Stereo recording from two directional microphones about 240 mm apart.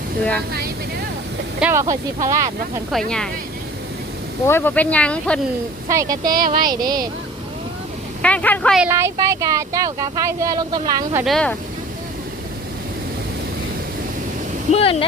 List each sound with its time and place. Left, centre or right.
1.5 s speech: centre
2.9 s speech: centre
4.4 s speech: centre
5.9 s speech: centre
6.2 s speech: right
6.7 s speech: centre
8.2 s speech: centre
11.3 s speech: centre
14.7 s speech: left